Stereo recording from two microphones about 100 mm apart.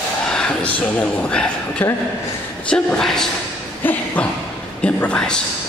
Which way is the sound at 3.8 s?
20° left (ahead or behind).